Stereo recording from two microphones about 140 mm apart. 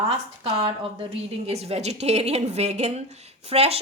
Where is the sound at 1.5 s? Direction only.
45° right (ahead or behind).